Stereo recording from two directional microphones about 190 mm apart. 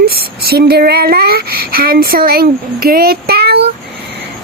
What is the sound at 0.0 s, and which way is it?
Speech, 55° right (ahead or behind).